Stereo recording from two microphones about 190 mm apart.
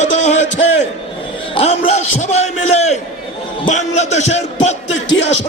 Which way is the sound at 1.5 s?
30° left (ahead or behind).